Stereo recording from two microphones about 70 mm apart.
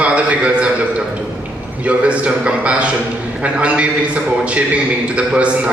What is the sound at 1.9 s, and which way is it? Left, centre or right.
A man's voice, centre.